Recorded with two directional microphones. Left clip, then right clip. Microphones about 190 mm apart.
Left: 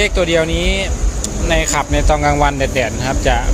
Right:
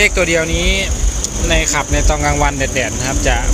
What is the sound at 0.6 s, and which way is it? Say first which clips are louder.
Speech: right 1 dB; 65° left (ahead or behind).